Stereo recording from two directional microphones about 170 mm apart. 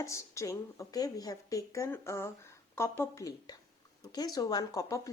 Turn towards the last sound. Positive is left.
turn(degrees=20)  # may be behind; listen again after turning